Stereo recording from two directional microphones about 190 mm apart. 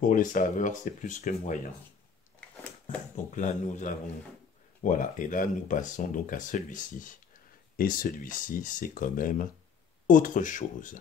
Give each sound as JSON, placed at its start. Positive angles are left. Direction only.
{"t": 0.0, "sound": "speech", "side_deg": 45}
{"t": 3.3, "sound": "speech", "side_deg": 40}